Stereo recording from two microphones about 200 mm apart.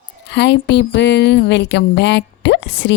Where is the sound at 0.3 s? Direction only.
60° left (ahead or behind).